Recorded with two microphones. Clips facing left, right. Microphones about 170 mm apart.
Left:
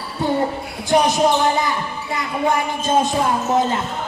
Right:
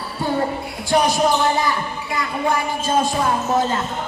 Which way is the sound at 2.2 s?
20° left (ahead or behind).